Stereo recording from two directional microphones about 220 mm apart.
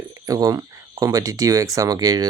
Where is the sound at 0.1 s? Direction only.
15° right (ahead or behind).